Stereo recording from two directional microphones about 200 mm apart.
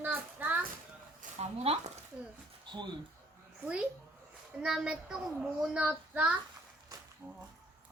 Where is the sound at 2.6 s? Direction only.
25° right (ahead or behind).